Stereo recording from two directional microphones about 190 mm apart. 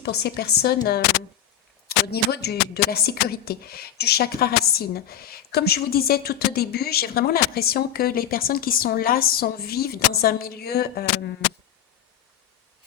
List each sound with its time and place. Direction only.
0.0 s a woman's voice: 60° left (ahead or behind)
2.0 s speech: 55° left (ahead or behind)